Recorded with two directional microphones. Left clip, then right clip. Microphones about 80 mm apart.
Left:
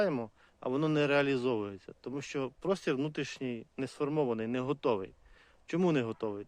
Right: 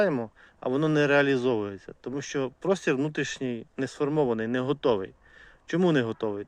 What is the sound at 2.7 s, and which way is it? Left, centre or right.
Speech, centre.